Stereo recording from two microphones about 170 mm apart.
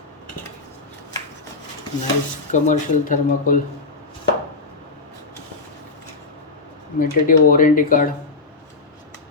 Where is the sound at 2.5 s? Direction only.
50° left (ahead or behind).